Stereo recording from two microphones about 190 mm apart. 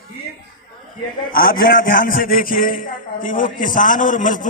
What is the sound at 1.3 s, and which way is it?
A man's voice, 50° left (ahead or behind).